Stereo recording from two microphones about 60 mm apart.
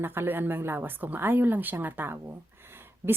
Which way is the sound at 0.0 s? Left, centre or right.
Right.